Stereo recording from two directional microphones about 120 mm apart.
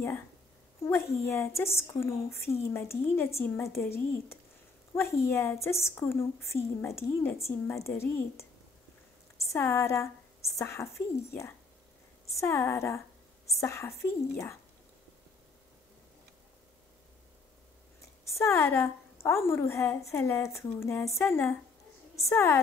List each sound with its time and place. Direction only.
0.8 s a woman's voice: 25° left (ahead or behind)
9.5 s a woman's voice: 25° left (ahead or behind)
18.2 s a woman's voice: 25° left (ahead or behind)